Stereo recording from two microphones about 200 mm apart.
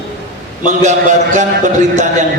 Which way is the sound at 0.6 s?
35° right (ahead or behind).